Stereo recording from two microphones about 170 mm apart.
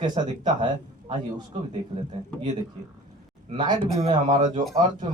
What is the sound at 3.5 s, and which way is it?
Speech, 25° right (ahead or behind).